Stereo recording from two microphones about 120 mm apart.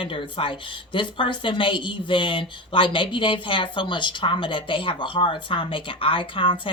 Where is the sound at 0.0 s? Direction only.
45° left (ahead or behind).